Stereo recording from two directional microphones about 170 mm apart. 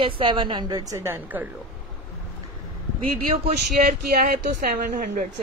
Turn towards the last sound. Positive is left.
turn(degrees=-55)  # may be behind; listen again after turning